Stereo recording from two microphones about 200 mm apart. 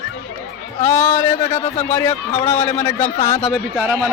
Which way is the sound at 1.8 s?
10° left (ahead or behind).